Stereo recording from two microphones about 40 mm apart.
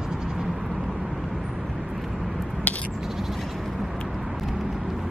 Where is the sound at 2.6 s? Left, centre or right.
Left.